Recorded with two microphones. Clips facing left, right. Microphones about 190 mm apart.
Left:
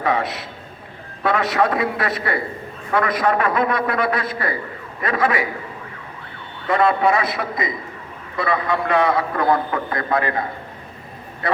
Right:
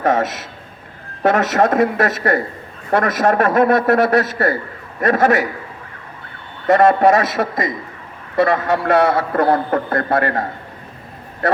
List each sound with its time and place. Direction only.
0.0 s a man's voice: 45° right (ahead or behind)
6.7 s a man's voice: 45° right (ahead or behind)
9.0 s a man's voice: 80° right
9.3 s a man's voice: 45° right (ahead or behind)